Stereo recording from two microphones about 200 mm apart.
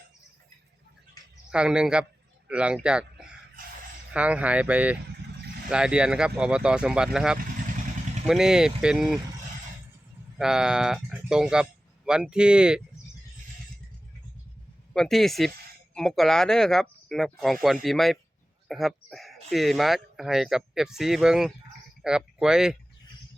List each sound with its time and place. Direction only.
1.5 s speech: 5° right (ahead or behind)
3.6 s a sound: 45° right (ahead or behind)
4.1 s speech: 5° right (ahead or behind)
10.3 s speech: 5° right (ahead or behind)
14.9 s speech: centre (ahead or behind)